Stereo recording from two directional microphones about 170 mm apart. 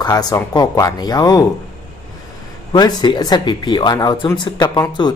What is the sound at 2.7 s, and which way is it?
A man's voice, 25° left (ahead or behind).